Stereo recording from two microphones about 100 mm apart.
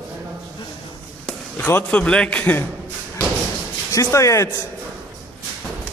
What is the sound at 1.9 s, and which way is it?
Speech, 10° left (ahead or behind).